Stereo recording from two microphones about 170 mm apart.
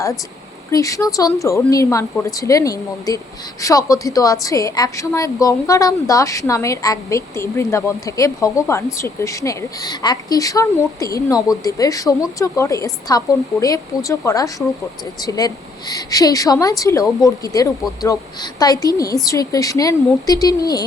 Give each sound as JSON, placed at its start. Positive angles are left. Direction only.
{"t": 0.7, "sound": "a woman's voice", "side_deg": 20}